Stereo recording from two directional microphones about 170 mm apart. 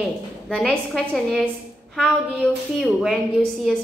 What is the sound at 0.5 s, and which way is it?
A woman's voice, 5° left (ahead or behind).